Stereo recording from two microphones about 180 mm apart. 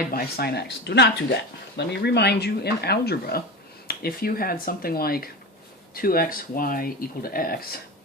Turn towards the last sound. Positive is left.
turn(degrees=55)  # may be behind; listen again after turning